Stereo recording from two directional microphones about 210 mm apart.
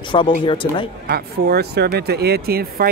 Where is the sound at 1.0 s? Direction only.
50° right (ahead or behind).